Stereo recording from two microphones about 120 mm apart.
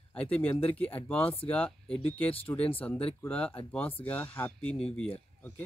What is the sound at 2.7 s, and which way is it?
Speech, 15° left (ahead or behind).